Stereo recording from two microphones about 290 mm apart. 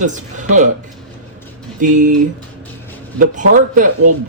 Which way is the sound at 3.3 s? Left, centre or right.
Right.